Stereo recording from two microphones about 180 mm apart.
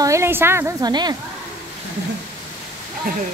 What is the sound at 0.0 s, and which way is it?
A woman's voice, 15° right (ahead or behind).